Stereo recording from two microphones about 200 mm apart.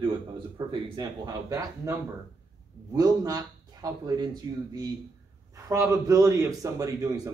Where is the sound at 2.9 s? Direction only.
20° right (ahead or behind).